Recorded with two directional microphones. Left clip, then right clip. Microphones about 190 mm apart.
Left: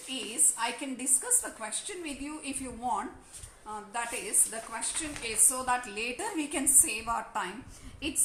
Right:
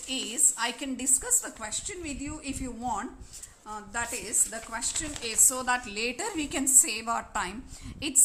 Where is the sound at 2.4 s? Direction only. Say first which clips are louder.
Even; 15° right (ahead or behind).